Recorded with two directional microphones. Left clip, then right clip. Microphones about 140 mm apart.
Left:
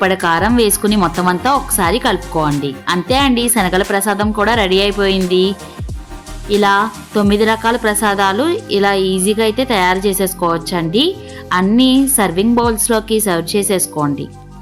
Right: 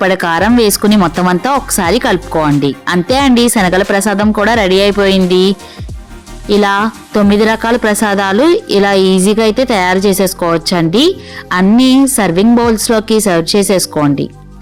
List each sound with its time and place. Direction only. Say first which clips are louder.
0.0 s a woman's voice: right 2 dB; 45° right (ahead or behind)